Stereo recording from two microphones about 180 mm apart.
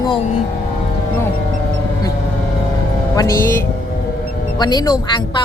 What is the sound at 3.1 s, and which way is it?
Speech, 15° left (ahead or behind).